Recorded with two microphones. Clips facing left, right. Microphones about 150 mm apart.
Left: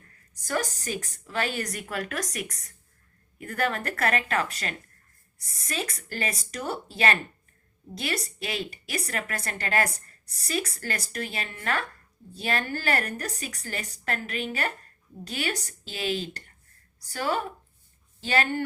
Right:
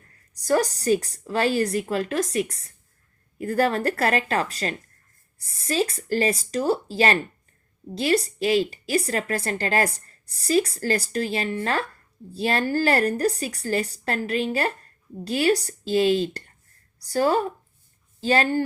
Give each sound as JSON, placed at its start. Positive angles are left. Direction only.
{"t": 0.3, "sound": "a woman's voice", "side_deg": -35}